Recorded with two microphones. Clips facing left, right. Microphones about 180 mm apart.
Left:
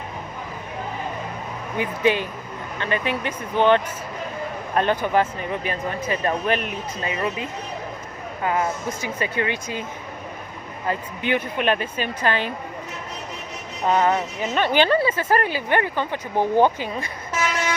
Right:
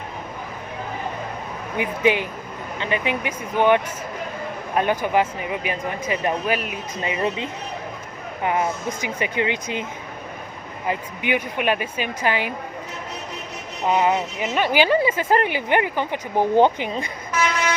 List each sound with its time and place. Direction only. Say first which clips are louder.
1.8 s speech: right 1 dB; 15° right (ahead or behind)
10.8 s speech: even; 15° right (ahead or behind)
13.8 s speech: even; 15° right (ahead or behind)